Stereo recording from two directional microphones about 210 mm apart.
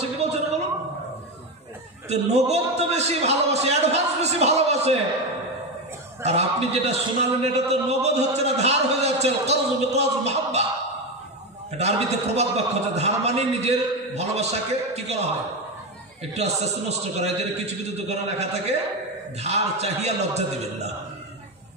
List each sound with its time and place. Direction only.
0.0 s a sound: 30° right (ahead or behind)
2.0 s a man's voice: 30° right (ahead or behind)
6.2 s a man's voice: 30° right (ahead or behind)
11.7 s a man's voice: 30° right (ahead or behind)